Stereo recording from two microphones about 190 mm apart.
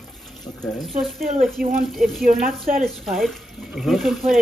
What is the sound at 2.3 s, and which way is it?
Speech, 45° right (ahead or behind).